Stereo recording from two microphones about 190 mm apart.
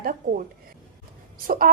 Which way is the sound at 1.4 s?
50° right (ahead or behind).